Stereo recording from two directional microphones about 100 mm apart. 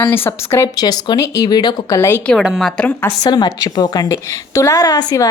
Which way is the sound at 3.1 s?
45° left (ahead or behind).